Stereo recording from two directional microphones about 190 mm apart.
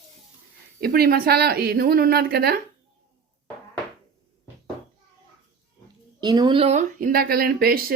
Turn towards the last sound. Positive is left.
turn(degrees=-50)  # may be behind; listen again after turning